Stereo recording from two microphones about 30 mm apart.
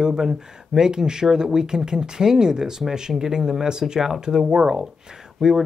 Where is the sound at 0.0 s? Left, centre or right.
Right.